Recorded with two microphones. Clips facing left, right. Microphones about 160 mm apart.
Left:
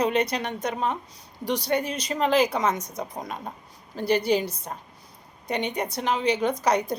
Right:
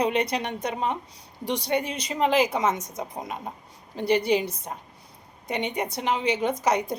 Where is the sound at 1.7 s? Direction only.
10° right (ahead or behind).